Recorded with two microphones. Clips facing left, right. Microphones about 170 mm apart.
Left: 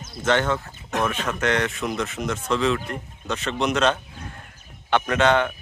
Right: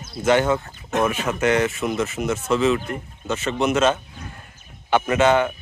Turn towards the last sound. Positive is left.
turn(degrees=-5)  # may be behind; listen again after turning